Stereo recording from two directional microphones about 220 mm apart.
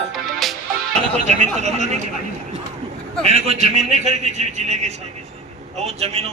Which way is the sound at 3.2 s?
30° right (ahead or behind).